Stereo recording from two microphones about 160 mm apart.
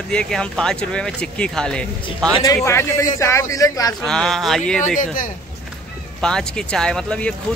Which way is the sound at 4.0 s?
5° left (ahead or behind).